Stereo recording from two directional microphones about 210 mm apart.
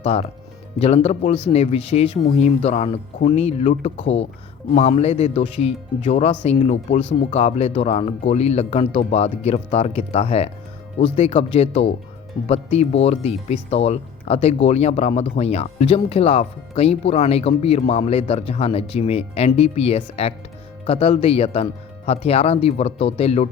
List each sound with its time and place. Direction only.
0.0 s speech: 30° left (ahead or behind)